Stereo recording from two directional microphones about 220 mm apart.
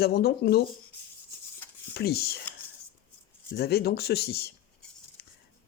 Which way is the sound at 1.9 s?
45° left (ahead or behind).